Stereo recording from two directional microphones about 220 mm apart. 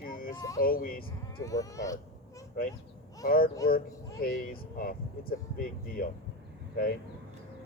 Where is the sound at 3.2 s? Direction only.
40° left (ahead or behind).